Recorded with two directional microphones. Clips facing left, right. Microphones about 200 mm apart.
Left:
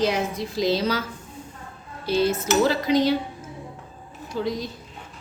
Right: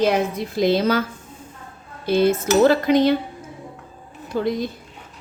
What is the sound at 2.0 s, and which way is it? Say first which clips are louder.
A woman's voice: right 4 dB; 55° right (ahead or behind).